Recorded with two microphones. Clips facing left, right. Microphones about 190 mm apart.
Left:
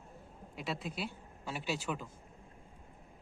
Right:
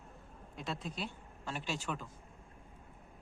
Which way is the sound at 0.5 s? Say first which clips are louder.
Left 2 dB; 5° left (ahead or behind).